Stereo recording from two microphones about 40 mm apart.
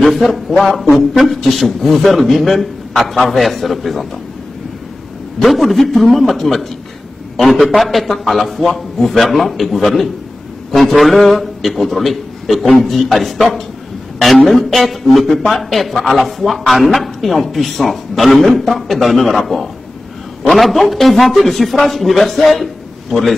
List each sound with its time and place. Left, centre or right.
0.0 s speech: centre
5.4 s a man's voice: centre